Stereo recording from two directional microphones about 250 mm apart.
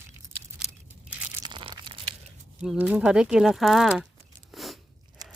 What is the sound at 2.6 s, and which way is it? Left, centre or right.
Speech, centre.